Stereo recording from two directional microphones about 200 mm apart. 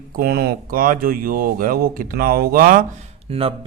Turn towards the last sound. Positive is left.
turn(degrees=-30)  # may be behind; listen again after turning